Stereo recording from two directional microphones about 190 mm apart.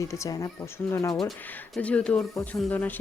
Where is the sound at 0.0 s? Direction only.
15° left (ahead or behind).